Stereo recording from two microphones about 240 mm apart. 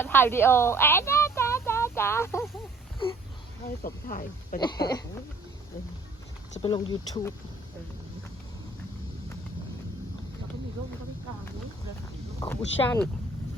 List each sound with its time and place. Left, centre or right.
0.0 s a woman's voice: centre
3.8 s speech: left
4.6 s speech: centre
6.6 s speech: centre
12.4 s speech: centre